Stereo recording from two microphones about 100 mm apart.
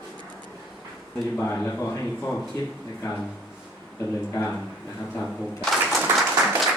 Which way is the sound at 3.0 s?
35° left (ahead or behind).